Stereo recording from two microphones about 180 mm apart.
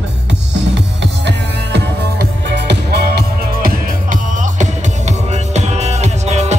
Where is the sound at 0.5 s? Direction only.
75° right (ahead or behind).